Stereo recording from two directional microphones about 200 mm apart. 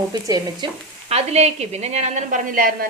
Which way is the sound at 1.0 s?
30° right (ahead or behind).